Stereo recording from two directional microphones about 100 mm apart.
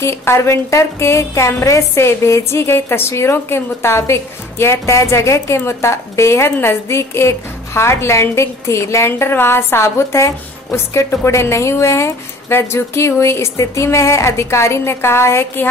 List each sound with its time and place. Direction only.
0.0 s a woman's voice: 25° left (ahead or behind)